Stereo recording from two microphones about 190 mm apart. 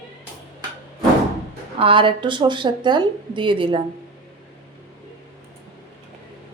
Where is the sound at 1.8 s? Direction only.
25° right (ahead or behind).